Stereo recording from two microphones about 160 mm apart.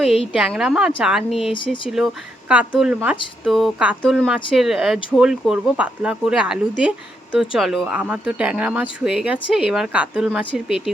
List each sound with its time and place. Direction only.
0.3 s speech: 5° right (ahead or behind)
1.5 s speech: 30° left (ahead or behind)
2.5 s speech: 5° right (ahead or behind)